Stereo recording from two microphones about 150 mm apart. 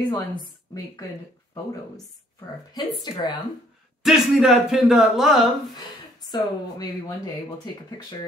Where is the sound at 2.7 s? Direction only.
25° left (ahead or behind).